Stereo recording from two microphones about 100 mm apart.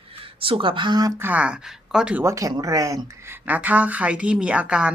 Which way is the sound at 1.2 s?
15° right (ahead or behind).